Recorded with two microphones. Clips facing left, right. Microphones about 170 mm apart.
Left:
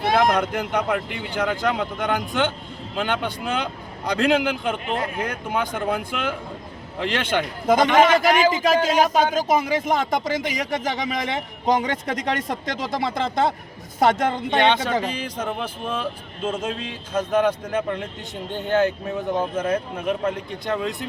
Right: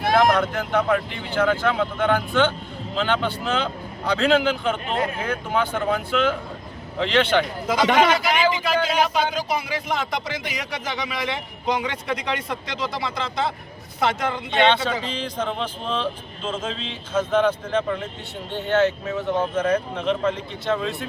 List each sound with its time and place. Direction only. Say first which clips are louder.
0.3 s speech: right 1 dB; 15° left (ahead or behind)
7.9 s speech: left 3 dB; 45° left (ahead or behind)
15.1 s speech: right 1 dB; 10° left (ahead or behind)